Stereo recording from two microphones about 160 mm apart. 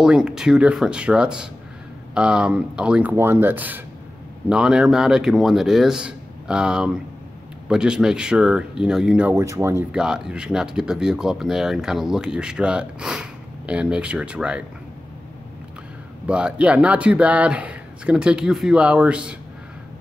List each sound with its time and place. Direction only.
0.0 s speech: 5° right (ahead or behind)
9.3 s speech: 20° right (ahead or behind)
9.9 s speech: 5° right (ahead or behind)
16.3 s speech: 5° right (ahead or behind)